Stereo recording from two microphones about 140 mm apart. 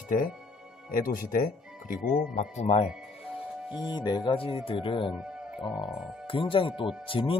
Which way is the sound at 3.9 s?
30° left (ahead or behind).